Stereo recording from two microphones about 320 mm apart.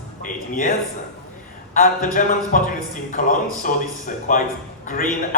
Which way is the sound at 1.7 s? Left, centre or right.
Left.